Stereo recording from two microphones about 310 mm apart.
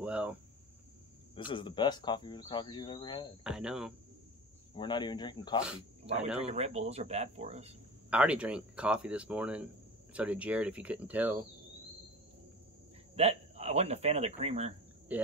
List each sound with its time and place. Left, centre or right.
0.0 s speech: centre
1.3 s speech: centre
3.4 s speech: centre
4.7 s speech: centre
6.4 s speech: right
8.1 s speech: centre
13.1 s speech: centre